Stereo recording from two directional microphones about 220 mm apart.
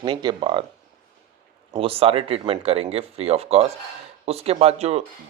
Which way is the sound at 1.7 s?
25° right (ahead or behind).